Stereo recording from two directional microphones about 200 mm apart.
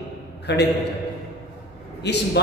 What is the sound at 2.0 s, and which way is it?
Speech, 55° left (ahead or behind).